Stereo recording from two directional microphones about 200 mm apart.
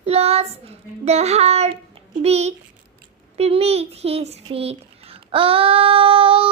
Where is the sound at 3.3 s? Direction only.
30° right (ahead or behind).